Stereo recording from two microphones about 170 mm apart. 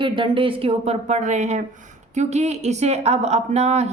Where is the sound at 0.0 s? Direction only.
30° right (ahead or behind).